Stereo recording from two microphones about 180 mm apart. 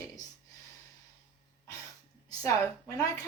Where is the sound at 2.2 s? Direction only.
20° left (ahead or behind).